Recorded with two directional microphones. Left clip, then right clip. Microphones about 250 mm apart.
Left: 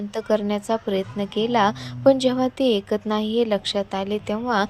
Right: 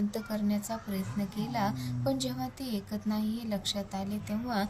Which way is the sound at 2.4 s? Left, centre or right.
Left.